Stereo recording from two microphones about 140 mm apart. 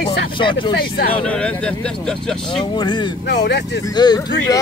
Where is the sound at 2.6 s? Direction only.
30° left (ahead or behind).